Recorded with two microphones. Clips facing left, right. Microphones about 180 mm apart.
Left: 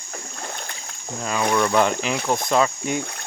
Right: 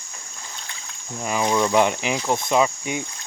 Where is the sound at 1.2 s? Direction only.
15° right (ahead or behind).